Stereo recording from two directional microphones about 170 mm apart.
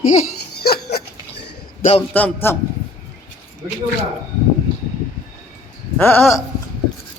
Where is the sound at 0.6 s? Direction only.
70° left (ahead or behind).